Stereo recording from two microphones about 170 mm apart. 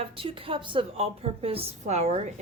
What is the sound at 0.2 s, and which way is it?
A woman's voice, 30° right (ahead or behind).